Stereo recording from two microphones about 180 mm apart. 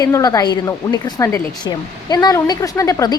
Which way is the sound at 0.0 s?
20° left (ahead or behind).